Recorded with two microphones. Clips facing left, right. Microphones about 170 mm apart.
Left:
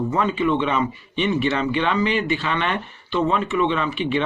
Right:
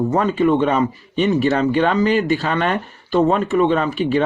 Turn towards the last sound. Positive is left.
turn(degrees=-40)  # may be behind; listen again after turning